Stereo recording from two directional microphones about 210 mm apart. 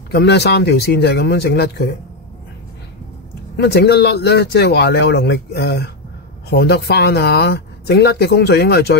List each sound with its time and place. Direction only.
0.1 s speech: 55° left (ahead or behind)
3.5 s speech: 50° left (ahead or behind)